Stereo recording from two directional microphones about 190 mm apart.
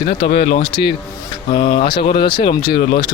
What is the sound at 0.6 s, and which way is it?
Speech, 25° left (ahead or behind).